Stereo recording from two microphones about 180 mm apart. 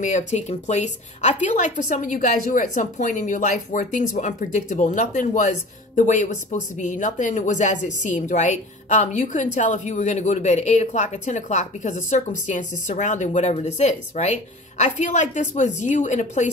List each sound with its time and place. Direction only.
0.0 s a woman's voice: 40° left (ahead or behind)